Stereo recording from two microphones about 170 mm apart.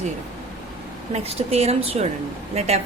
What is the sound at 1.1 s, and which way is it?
A woman's voice, 35° right (ahead or behind).